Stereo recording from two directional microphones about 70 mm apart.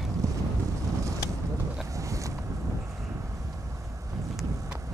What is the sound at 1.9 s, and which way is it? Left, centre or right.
Vehicle, right.